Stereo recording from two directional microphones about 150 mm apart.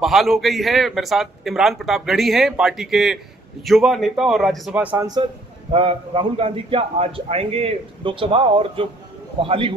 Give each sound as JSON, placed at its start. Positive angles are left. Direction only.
{"t": 0.0, "sound": "a man's voice", "side_deg": 0}
{"t": 5.0, "sound": "a man's voice", "side_deg": -30}